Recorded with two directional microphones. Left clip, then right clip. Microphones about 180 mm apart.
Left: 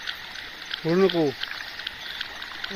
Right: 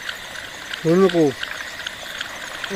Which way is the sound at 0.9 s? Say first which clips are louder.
Right 5 dB; 20° left (ahead or behind).